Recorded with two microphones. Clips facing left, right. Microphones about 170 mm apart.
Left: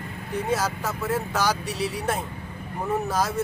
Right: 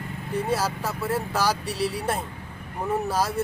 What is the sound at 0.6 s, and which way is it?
Speech, 10° right (ahead or behind).